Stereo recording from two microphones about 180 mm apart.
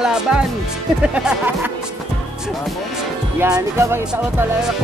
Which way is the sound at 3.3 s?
15° right (ahead or behind).